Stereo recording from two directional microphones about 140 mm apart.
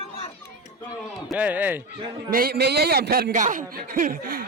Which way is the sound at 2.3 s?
90° right.